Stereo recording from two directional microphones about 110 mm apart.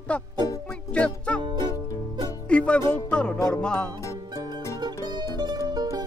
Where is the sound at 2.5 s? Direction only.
10° left (ahead or behind).